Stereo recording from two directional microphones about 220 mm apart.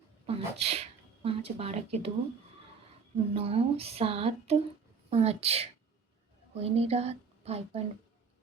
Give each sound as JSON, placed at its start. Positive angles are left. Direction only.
{"t": 0.3, "sound": "speech", "side_deg": -25}
{"t": 3.3, "sound": "a woman's voice", "side_deg": -25}